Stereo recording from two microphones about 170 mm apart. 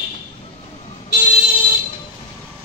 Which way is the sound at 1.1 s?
40° left (ahead or behind).